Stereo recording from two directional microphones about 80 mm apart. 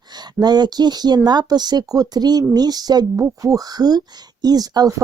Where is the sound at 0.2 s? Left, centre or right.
Right.